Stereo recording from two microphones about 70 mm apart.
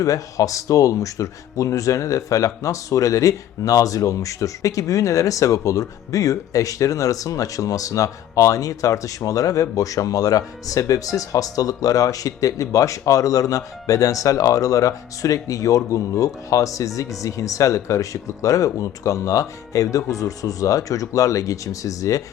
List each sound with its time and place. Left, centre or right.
0.0 s speech: left